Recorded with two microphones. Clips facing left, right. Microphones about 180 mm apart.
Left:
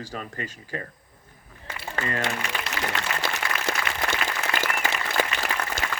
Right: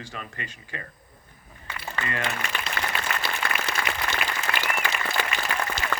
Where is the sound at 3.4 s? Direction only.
55° right (ahead or behind).